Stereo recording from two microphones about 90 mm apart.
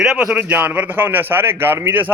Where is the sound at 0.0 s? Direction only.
5° right (ahead or behind).